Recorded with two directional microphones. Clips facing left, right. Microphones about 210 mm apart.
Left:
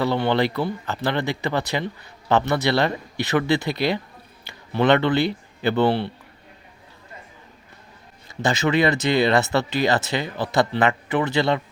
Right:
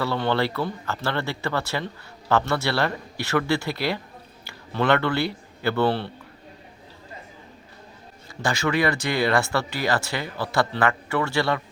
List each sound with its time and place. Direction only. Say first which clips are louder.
0.0 s a man's voice: left 3 dB; 15° left (ahead or behind)
8.4 s speech: left 3 dB; 20° left (ahead or behind)